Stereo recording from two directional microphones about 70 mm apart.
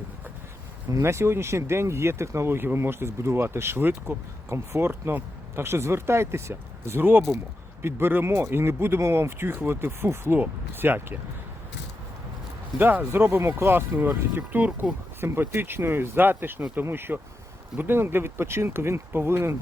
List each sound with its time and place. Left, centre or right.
1.0 s speech: right
12.8 s speech: right